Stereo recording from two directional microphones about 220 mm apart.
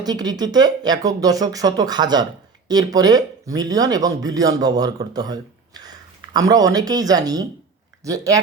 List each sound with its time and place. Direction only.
0.0 s speech: 20° right (ahead or behind)